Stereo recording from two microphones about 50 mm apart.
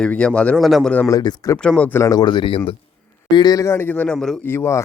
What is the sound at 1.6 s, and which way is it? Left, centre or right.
Speech, left.